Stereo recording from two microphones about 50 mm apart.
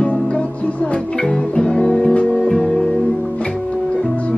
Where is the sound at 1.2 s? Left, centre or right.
Centre.